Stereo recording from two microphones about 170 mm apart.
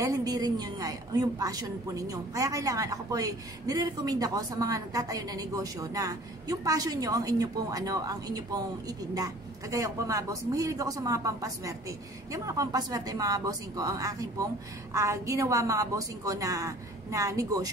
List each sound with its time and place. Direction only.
0.0 s a woman's voice: 20° right (ahead or behind)